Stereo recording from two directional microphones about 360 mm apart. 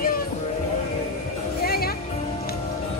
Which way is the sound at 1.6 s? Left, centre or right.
Left.